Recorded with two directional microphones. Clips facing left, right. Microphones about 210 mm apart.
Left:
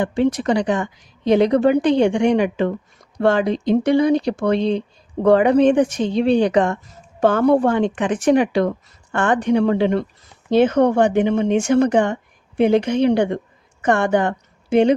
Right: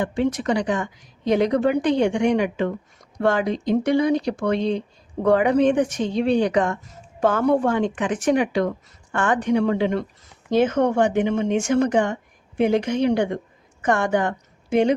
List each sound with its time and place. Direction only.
0.0 s a woman's voice: 30° left (ahead or behind)